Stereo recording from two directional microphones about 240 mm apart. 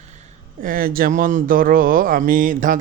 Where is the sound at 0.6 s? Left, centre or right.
Right.